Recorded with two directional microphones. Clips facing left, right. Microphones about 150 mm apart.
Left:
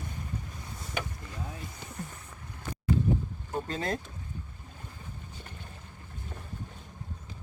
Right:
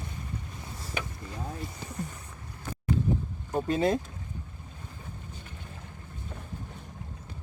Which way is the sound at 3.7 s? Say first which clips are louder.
Right 9 dB; 20° right (ahead or behind).